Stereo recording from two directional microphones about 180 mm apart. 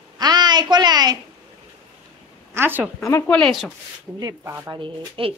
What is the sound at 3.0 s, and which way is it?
Speech, 15° left (ahead or behind).